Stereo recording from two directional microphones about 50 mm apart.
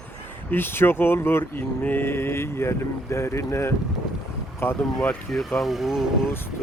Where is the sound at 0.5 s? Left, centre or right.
Left.